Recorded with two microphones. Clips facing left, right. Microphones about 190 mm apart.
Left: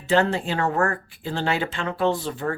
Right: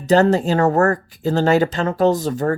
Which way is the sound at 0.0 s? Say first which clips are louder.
Right 7 dB; 40° right (ahead or behind).